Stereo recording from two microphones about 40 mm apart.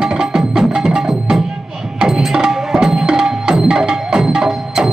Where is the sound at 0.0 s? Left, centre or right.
Centre.